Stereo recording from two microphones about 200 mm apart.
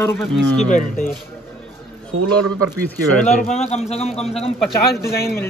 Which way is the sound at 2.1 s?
90° right.